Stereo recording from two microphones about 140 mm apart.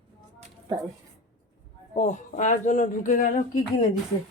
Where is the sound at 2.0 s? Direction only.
60° left (ahead or behind).